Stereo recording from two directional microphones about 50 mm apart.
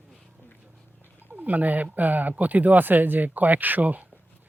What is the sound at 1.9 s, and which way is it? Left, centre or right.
Speech, right.